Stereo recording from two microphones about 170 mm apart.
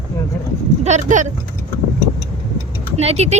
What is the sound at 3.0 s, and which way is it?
Speech, 40° right (ahead or behind).